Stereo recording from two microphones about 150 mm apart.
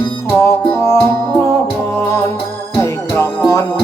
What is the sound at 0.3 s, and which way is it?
Music, 20° left (ahead or behind).